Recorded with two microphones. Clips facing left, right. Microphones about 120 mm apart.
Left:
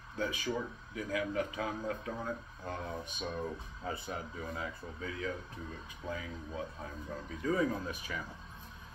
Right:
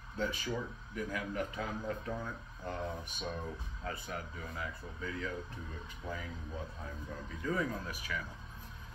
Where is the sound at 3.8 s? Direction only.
25° left (ahead or behind).